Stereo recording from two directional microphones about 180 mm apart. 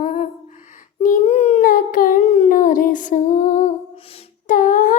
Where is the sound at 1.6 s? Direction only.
50° left (ahead or behind).